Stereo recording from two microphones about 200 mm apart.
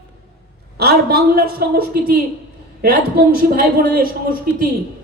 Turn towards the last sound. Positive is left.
turn(degrees=-45)  # may be behind; listen again after turning